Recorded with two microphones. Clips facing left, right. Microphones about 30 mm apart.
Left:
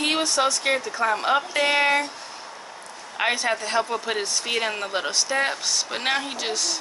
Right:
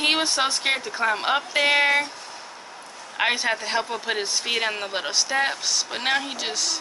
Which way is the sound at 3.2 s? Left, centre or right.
Centre.